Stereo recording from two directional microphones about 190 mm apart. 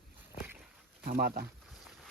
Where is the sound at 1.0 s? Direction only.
50° right (ahead or behind).